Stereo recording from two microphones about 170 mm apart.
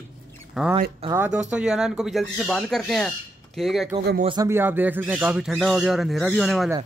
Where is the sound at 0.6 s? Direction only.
Centre (ahead or behind).